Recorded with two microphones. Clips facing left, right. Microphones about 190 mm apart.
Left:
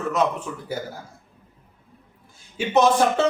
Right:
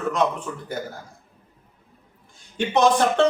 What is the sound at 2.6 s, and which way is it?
Speech, 5° left (ahead or behind).